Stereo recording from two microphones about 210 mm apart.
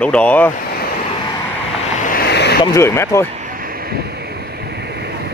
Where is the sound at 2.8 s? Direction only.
10° left (ahead or behind).